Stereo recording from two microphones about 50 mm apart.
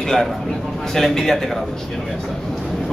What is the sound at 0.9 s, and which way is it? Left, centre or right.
Speech, centre.